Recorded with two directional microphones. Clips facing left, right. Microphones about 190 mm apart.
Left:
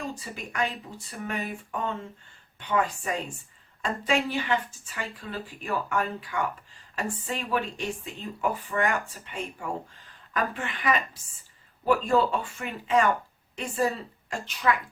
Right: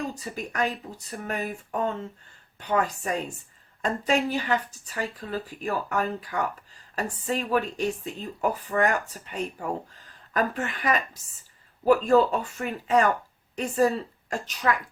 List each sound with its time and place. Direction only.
0.1 s speech: 40° right (ahead or behind)
2.6 s speech: 40° right (ahead or behind)